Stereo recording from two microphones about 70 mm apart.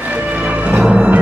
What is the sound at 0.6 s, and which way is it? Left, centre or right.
Music, centre.